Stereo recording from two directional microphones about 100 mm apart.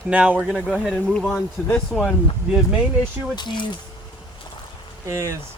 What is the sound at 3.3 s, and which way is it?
Speech, 50° left (ahead or behind).